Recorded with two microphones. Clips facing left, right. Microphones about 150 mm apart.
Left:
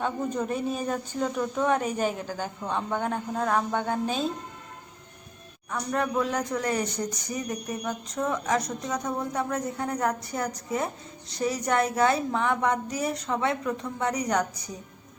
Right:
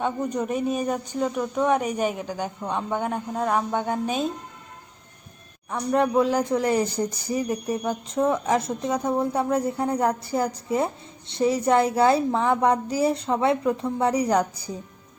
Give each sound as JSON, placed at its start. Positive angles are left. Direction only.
{"t": 0.0, "sound": "speech", "side_deg": -15}
{"t": 5.7, "sound": "speech", "side_deg": -30}